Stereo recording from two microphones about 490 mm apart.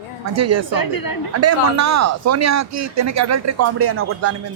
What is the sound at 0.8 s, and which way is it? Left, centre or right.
Speech, left.